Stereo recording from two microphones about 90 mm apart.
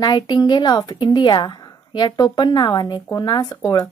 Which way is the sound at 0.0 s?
50° left (ahead or behind).